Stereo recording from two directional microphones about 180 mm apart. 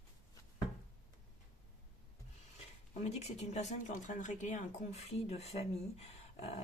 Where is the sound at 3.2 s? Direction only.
40° left (ahead or behind).